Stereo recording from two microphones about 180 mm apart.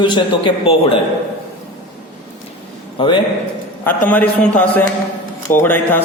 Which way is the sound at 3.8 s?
10° left (ahead or behind).